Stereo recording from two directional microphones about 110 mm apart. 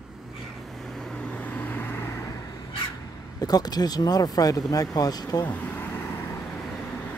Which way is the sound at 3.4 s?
35° left (ahead or behind).